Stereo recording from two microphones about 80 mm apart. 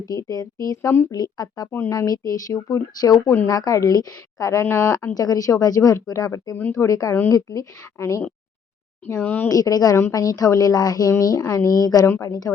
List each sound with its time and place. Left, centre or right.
0.0 s a woman's voice: left
0.8 s speech: left
1.1 s a woman's voice: left
3.2 s speech: left
3.5 s a woman's voice: left
4.6 s speech: left
5.1 s a woman's voice: left
9.1 s speech: left
9.5 s a woman's voice: left
9.9 s a woman's voice: left